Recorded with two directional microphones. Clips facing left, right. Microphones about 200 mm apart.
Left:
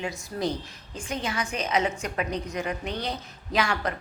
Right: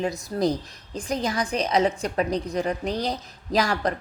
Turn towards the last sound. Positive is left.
turn(degrees=-35)  # may be behind; listen again after turning